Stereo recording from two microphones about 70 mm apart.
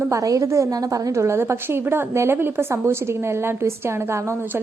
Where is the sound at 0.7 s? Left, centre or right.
Right.